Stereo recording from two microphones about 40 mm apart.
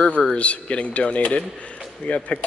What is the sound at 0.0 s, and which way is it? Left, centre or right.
Speech, left.